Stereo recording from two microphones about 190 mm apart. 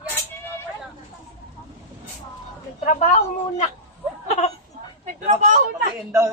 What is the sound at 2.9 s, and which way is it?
Speech, 40° left (ahead or behind).